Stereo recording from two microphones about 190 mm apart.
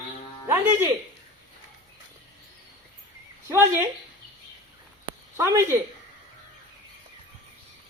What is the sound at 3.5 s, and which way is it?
Speech, 10° right (ahead or behind).